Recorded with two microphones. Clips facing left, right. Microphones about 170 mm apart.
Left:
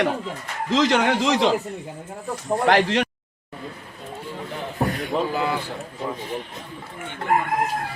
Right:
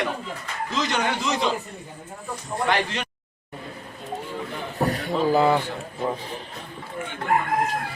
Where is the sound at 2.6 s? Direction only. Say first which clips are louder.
Left 6 dB; 90° left.